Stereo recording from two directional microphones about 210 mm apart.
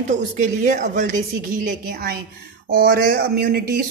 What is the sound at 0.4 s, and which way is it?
A woman's voice, 35° right (ahead or behind).